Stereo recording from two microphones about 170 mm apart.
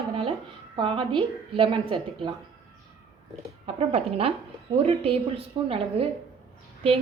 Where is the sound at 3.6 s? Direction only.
35° right (ahead or behind).